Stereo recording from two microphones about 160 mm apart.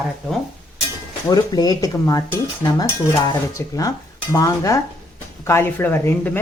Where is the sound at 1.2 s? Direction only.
25° left (ahead or behind).